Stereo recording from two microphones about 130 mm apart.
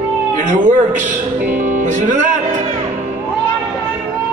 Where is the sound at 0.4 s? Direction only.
75° right (ahead or behind).